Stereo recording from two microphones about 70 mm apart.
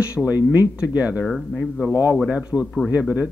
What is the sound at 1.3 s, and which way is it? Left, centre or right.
Speech, centre.